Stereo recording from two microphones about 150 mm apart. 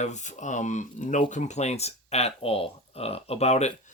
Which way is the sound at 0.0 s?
50° left (ahead or behind).